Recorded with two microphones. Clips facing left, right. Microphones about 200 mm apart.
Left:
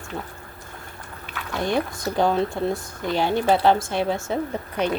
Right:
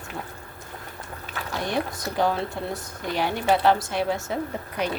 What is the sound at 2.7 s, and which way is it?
A woman's voice, 25° left (ahead or behind).